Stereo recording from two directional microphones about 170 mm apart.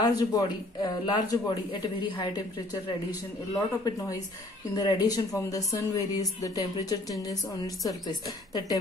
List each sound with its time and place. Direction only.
0.0 s speech: 20° left (ahead or behind)